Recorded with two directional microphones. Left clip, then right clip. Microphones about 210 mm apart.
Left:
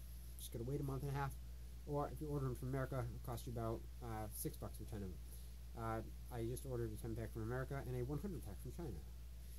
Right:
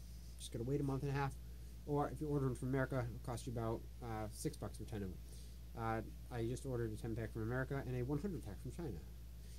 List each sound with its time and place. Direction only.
0.4 s speech: centre (ahead or behind)
1.9 s speech: 10° right (ahead or behind)